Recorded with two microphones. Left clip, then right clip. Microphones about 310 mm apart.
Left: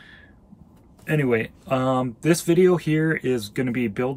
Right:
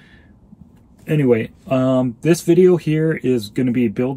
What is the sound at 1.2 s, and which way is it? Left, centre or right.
Speech, right.